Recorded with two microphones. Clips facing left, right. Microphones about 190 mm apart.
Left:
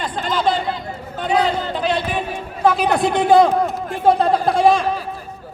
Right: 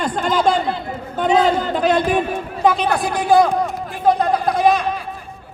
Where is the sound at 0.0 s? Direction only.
45° right (ahead or behind).